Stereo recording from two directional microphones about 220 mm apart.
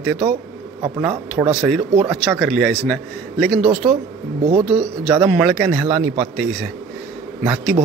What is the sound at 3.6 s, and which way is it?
A man's voice, 25° right (ahead or behind).